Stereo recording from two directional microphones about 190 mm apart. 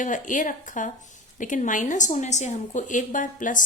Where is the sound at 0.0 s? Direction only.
45° left (ahead or behind).